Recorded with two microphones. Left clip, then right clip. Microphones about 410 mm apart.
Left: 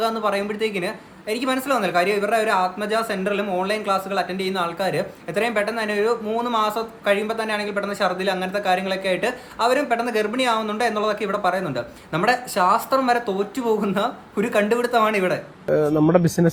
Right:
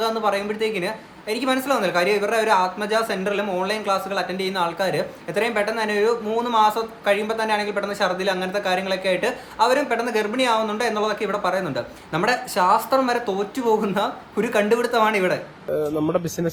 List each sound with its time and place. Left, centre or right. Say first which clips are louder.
0.0 s speech: even; centre
15.7 s speech: left 5 dB; left